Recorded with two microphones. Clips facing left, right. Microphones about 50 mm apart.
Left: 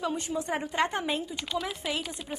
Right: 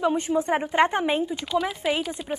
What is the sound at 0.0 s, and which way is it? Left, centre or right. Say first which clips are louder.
Speech: right 8 dB; right.